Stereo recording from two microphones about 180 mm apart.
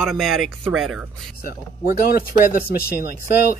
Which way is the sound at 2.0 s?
55° left (ahead or behind).